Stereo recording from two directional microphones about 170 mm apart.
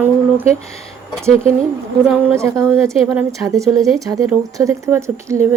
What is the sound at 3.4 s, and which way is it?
A woman's voice, 20° right (ahead or behind).